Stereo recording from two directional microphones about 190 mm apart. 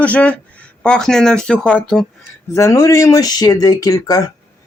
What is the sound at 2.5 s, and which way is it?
Speech, 15° left (ahead or behind).